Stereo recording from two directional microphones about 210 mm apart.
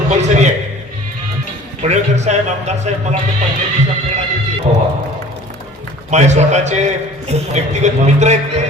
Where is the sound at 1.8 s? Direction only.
35° right (ahead or behind).